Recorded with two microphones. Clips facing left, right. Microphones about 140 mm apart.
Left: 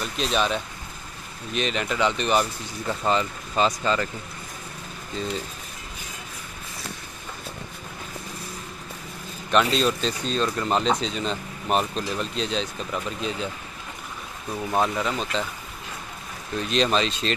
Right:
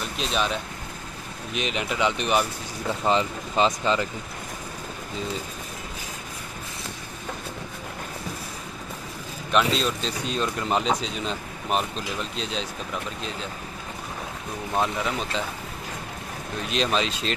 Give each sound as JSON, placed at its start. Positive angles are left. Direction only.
{"t": 0.2, "sound": "speech", "side_deg": 0}
{"t": 3.0, "sound": "speech", "side_deg": -20}
{"t": 9.5, "sound": "speech", "side_deg": 0}
{"t": 14.8, "sound": "speech", "side_deg": -5}
{"t": 16.7, "sound": "speech", "side_deg": -5}